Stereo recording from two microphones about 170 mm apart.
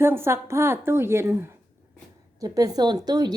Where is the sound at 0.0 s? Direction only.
15° right (ahead or behind).